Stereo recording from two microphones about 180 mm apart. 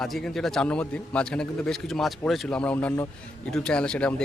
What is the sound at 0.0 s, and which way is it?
A man's voice, centre (ahead or behind).